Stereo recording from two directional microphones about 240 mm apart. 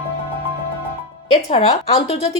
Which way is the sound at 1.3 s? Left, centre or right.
Left.